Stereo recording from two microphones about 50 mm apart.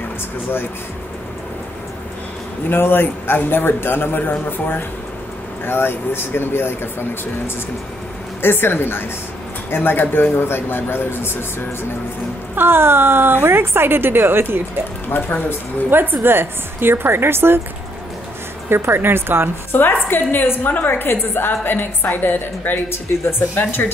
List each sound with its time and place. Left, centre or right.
2.7 s a woman's voice: left
12.5 s a woman's voice: right
15.0 s speech: left
15.9 s a woman's voice: right
18.7 s a woman's voice: right
19.7 s a woman's voice: left